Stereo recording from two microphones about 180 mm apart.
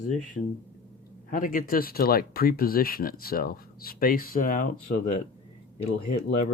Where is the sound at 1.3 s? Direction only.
50° left (ahead or behind).